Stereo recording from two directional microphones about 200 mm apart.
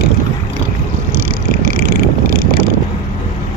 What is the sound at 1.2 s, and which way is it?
Vehicle, 45° right (ahead or behind).